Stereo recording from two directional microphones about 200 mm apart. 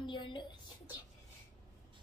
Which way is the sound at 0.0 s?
25° left (ahead or behind).